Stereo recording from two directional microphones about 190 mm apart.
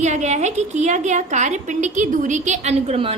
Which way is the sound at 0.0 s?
35° right (ahead or behind).